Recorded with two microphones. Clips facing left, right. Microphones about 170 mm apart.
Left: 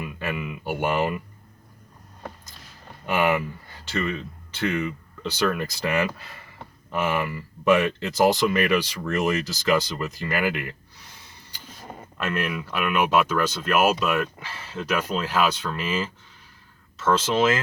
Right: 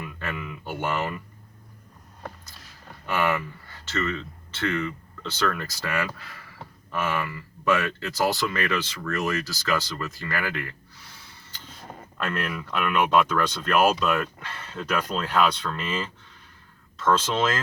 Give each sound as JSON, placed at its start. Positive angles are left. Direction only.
{"t": 0.0, "sound": "speech", "side_deg": 15}
{"t": 3.1, "sound": "speech", "side_deg": 15}
{"t": 11.8, "sound": "speech", "side_deg": 5}